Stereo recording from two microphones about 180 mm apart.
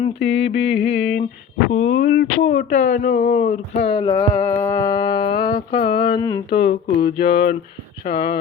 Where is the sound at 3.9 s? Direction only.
30° left (ahead or behind).